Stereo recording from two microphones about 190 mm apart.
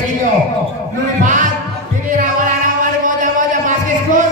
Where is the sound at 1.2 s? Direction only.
40° right (ahead or behind).